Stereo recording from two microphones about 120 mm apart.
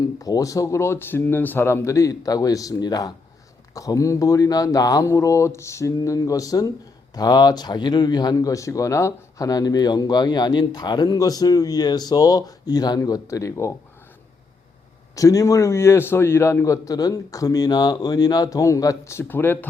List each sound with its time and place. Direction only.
0.0 s a man's voice: 30° left (ahead or behind)
15.1 s a man's voice: 30° left (ahead or behind)